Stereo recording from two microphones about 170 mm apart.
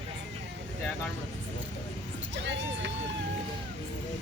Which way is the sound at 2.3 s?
90° right.